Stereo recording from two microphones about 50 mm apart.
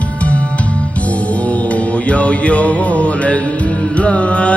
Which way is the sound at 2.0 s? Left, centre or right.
Left.